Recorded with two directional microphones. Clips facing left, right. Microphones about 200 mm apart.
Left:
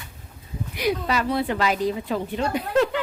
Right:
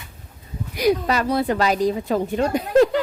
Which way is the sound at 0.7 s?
40° right (ahead or behind).